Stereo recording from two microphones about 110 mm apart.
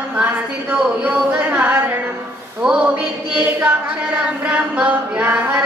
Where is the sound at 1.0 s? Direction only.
10° right (ahead or behind).